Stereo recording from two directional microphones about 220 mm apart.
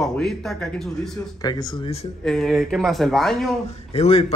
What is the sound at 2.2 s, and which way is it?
Speech, centre (ahead or behind).